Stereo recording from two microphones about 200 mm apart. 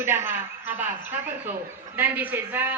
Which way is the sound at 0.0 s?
10° right (ahead or behind).